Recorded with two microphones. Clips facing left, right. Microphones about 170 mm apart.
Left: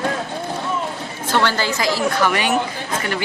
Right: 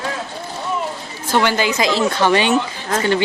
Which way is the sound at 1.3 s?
15° right (ahead or behind).